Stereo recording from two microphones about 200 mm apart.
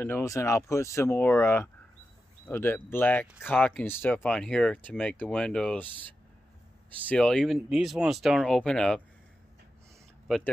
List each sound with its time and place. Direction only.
0.0 s speech: 15° left (ahead or behind)
7.1 s speech: 5° left (ahead or behind)
10.2 s speech: centre (ahead or behind)